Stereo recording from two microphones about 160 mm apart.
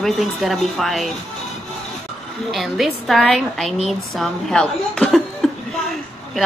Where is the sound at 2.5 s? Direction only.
Centre (ahead or behind).